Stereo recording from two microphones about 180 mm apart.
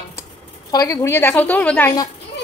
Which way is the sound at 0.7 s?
20° left (ahead or behind).